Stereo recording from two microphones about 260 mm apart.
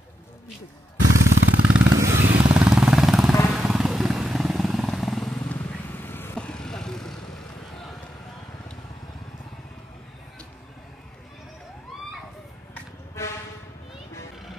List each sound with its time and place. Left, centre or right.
1.0 s a sound: right
1.8 s motorcycle: centre
2.1 s vehicle: right
2.4 s vehicle: centre
12.7 s vehicle: centre